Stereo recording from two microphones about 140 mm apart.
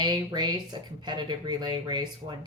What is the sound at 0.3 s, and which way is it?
Speech, 30° right (ahead or behind).